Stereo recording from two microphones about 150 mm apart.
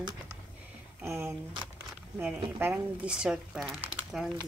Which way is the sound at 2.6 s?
10° right (ahead or behind).